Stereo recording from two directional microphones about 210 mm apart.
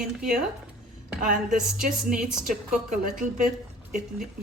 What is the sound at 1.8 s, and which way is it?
A woman's voice, 40° right (ahead or behind).